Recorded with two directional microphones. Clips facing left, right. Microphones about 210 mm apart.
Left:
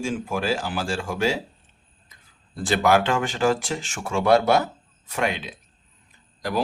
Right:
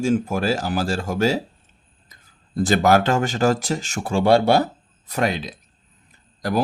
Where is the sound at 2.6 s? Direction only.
40° right (ahead or behind).